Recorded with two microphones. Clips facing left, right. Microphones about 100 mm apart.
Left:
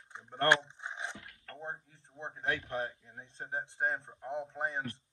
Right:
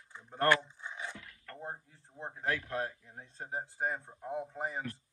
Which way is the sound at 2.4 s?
25° left (ahead or behind).